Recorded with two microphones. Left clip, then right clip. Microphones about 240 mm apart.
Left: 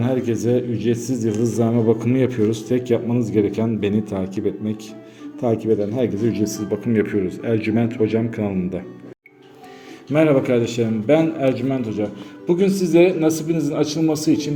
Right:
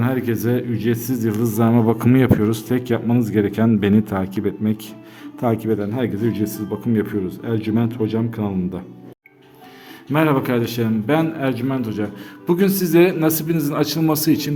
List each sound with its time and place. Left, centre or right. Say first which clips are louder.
0.0 s a man's voice: left 1 dB; centre
10.1 s a man's voice: left 2 dB; centre
12.9 s a man's voice: even; right
13.1 s speech: even; right